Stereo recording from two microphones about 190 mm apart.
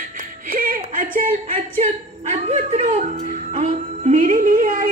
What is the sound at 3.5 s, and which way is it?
Music, 35° right (ahead or behind).